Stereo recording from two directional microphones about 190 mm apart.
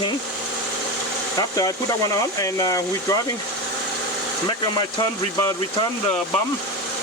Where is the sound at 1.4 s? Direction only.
20° left (ahead or behind).